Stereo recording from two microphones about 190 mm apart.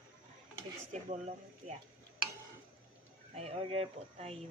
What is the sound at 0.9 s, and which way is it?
Speech, 40° right (ahead or behind).